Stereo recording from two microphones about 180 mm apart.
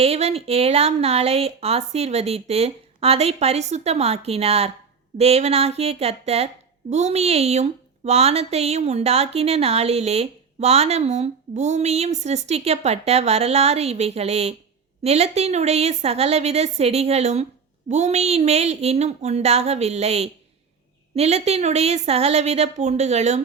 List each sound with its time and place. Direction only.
0.0 s a woman's voice: 35° right (ahead or behind)